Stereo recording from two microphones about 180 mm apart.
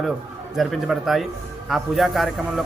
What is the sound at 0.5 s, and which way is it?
A man's voice, centre (ahead or behind).